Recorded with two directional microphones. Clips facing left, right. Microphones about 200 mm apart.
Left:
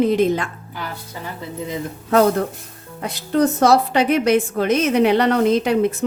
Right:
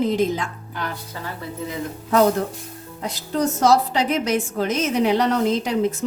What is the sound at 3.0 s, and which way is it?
A woman's voice, 60° left (ahead or behind).